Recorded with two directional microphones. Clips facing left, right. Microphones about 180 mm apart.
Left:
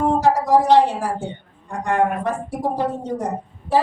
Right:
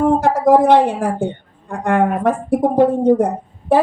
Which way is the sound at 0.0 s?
55° right (ahead or behind).